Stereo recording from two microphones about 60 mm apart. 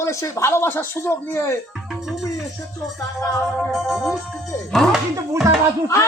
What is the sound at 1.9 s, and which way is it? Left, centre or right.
Speech, centre.